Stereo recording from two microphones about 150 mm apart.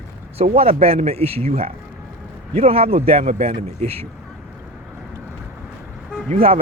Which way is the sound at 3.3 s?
60° right (ahead or behind).